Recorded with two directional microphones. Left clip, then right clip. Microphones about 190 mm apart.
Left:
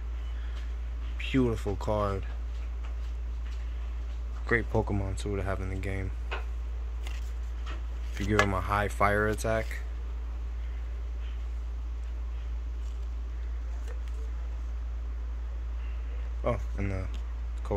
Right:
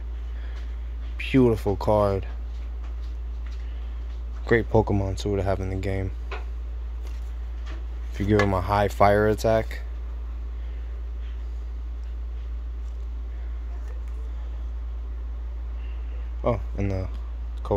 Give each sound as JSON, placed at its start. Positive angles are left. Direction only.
{"t": 1.1, "sound": "speech", "side_deg": -40}
{"t": 4.5, "sound": "speech", "side_deg": -45}
{"t": 8.3, "sound": "speech", "side_deg": -40}
{"t": 16.4, "sound": "speech", "side_deg": -45}
{"t": 17.6, "sound": "a sound", "side_deg": -40}